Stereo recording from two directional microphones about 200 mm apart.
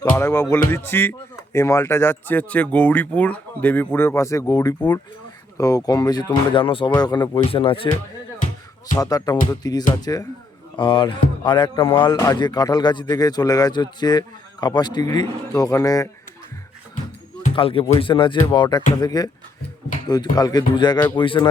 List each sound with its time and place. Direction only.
0.0 s speech: 15° left (ahead or behind)
9.0 s speech: 20° left (ahead or behind)
17.5 s speech: 25° left (ahead or behind)